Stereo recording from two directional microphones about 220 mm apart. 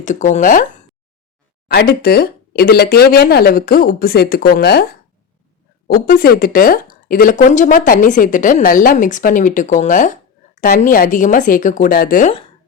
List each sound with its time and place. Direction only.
0.0 s a woman's voice: 35° left (ahead or behind)
5.9 s a woman's voice: 40° left (ahead or behind)